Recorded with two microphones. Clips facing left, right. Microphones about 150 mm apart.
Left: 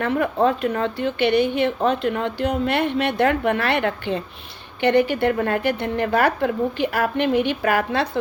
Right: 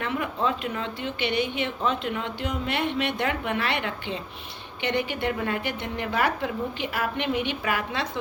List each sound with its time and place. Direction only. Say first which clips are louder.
0.0 s a woman's voice: left 8 dB; 45° left (ahead or behind)
1.8 s a woman's voice: left 7 dB; 55° left (ahead or behind)